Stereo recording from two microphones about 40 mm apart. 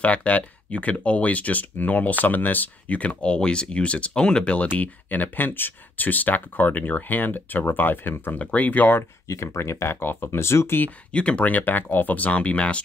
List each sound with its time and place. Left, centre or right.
0.0 s speech: left
4.7 s speech: left
8.4 s speech: left
9.6 s speech: left
11.1 s speech: left